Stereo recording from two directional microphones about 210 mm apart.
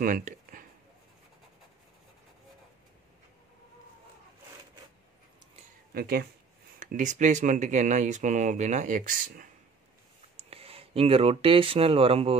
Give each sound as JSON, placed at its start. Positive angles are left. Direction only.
{"t": 0.0, "sound": "a sound", "side_deg": -40}
{"t": 5.9, "sound": "speech", "side_deg": -45}
{"t": 10.3, "sound": "speech", "side_deg": -25}